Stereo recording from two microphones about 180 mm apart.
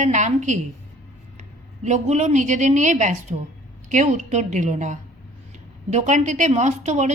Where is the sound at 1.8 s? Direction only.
40° right (ahead or behind).